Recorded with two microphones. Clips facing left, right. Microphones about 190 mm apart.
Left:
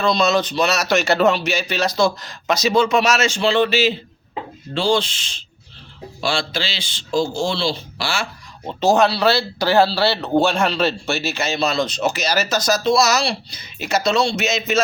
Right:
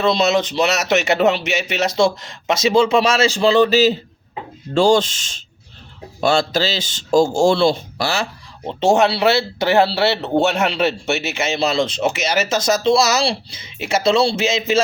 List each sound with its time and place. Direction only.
0.0 s speech: 25° right (ahead or behind)